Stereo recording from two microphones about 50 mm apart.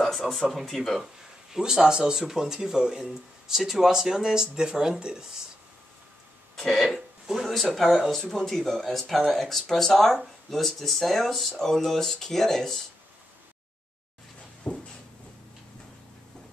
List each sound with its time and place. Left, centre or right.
0.5 s speech: centre
1.5 s speech: centre
6.5 s speech: centre
6.9 s speech: centre
14.7 s a sound: left